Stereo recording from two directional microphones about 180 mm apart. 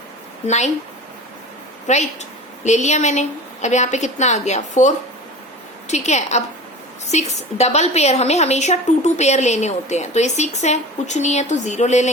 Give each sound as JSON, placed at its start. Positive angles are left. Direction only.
{"t": 0.4, "sound": "a woman's voice", "side_deg": 40}
{"t": 1.9, "sound": "a woman's voice", "side_deg": 40}